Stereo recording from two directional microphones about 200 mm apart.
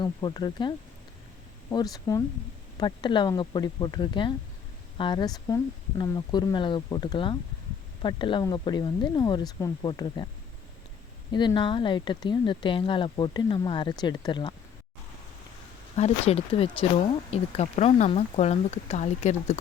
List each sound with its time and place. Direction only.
0.0 s speech: 20° left (ahead or behind)
1.7 s speech: 20° left (ahead or behind)
11.3 s speech: 20° left (ahead or behind)
16.0 s speech: 30° left (ahead or behind)